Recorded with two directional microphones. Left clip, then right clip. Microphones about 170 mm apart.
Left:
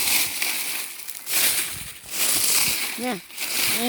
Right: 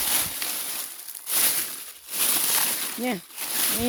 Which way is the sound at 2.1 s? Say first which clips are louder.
Left 3 dB; 60° right (ahead or behind).